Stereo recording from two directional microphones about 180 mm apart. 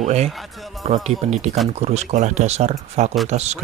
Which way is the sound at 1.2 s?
35° right (ahead or behind).